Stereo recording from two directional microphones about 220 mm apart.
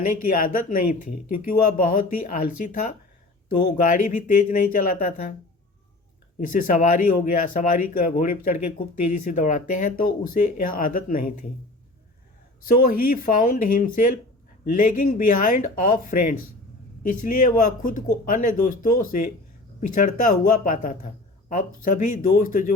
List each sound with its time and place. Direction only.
0.0 s speech: 40° left (ahead or behind)
6.4 s speech: 40° left (ahead or behind)
12.6 s speech: 40° left (ahead or behind)